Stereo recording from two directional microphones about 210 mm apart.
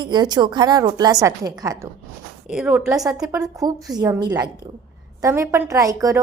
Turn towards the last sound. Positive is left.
turn(degrees=-15)  # may be behind; listen again after turning